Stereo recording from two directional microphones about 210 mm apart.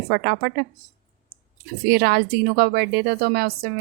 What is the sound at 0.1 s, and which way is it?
Speech, 50° right (ahead or behind).